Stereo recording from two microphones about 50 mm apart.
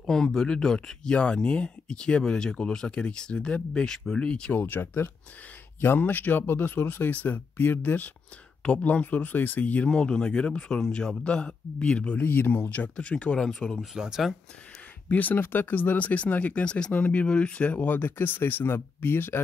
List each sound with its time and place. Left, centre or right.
0.0 s speech: centre
4.6 s speech: left
9.8 s speech: centre
12.2 s speech: left
13.4 s speech: centre
13.7 s speech: centre
15.0 s speech: left
17.8 s speech: left